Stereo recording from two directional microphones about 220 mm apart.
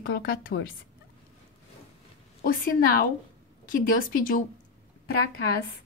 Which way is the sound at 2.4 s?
40° left (ahead or behind).